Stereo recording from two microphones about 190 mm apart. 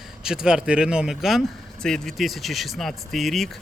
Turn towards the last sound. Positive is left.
turn(degrees=0)  # may be behind; listen again after turning